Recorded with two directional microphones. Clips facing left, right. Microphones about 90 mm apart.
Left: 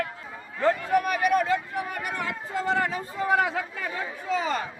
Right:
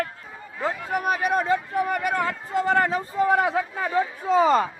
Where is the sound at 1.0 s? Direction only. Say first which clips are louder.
Even; 30° right (ahead or behind).